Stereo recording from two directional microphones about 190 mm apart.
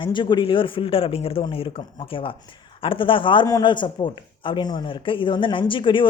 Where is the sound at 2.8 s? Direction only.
25° left (ahead or behind).